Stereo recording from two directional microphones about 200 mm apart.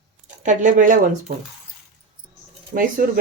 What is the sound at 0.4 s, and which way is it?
Speech, 40° right (ahead or behind).